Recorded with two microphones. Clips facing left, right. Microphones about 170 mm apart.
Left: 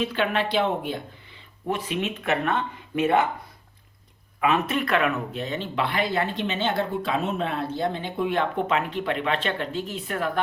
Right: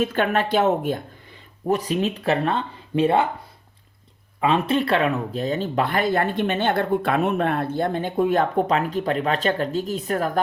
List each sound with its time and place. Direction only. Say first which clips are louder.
0.0 s a woman's voice: right 3 dB; 50° right (ahead or behind); by 3.2 s 30° right (ahead or behind)
4.4 s speech: right 3 dB; 30° right (ahead or behind)